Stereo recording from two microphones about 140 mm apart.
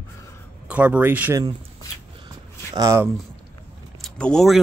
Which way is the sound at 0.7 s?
10° right (ahead or behind).